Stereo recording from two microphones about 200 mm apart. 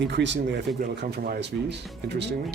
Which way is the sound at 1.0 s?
50° right (ahead or behind).